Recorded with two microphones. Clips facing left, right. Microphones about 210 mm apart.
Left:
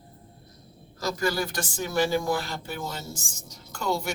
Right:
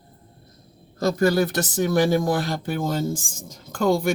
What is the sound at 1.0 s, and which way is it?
A woman's voice, 55° right (ahead or behind).